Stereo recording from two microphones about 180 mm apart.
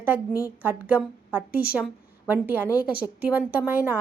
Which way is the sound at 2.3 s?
10° right (ahead or behind).